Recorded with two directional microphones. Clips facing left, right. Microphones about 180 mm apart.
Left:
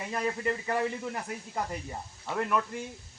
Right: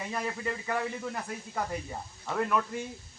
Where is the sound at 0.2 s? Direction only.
15° left (ahead or behind).